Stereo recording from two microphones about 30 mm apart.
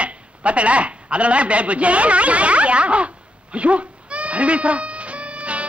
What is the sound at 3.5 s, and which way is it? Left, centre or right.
Goat, right.